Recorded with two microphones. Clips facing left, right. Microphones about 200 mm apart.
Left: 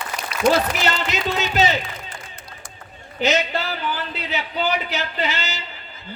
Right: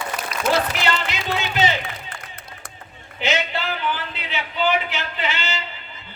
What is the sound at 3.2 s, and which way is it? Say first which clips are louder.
A man's voice: left 3 dB; 40° left (ahead or behind).